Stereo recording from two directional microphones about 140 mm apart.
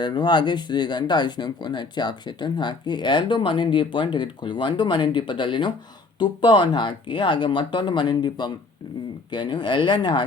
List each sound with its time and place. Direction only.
0.0 s speech: 35° left (ahead or behind)